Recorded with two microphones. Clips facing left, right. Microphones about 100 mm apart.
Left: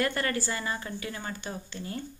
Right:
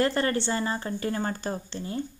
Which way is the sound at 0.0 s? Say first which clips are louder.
Right 4 dB; 30° right (ahead or behind).